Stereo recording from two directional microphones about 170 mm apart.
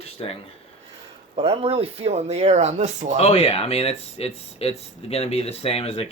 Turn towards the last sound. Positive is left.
turn(degrees=35)  # may be behind; listen again after turning